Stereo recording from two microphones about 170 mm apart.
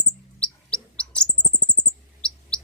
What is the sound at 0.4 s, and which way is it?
Bird, 5° left (ahead or behind).